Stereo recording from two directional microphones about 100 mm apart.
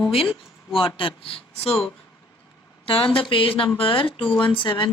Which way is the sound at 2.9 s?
65° left (ahead or behind).